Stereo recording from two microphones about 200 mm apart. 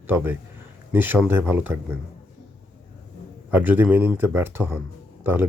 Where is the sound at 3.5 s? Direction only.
10° right (ahead or behind).